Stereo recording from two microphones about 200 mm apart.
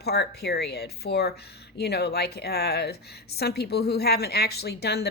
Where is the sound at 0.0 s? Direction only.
55° left (ahead or behind).